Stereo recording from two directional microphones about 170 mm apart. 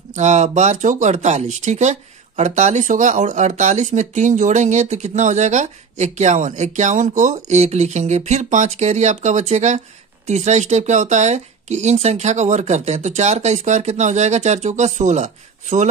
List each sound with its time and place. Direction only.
0.1 s speech: 45° right (ahead or behind)